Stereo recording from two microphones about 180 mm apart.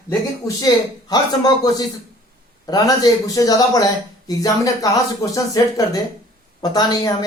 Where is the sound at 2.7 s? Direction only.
20° left (ahead or behind).